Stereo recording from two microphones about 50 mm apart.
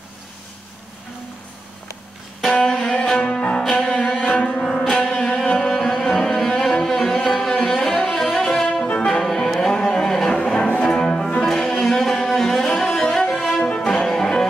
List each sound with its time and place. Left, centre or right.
2.5 s cello: centre
4.4 s music: centre
4.6 s music: centre
4.9 s music: centre
5.5 s cello: centre
7.6 s music: centre